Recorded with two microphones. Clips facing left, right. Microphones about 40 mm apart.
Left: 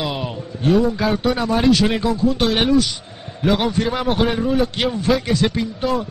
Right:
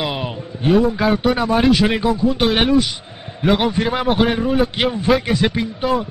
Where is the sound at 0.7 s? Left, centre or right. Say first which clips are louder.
Right 3 dB; centre.